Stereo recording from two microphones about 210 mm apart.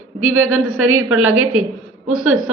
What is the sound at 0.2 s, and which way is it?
Speech, 80° right.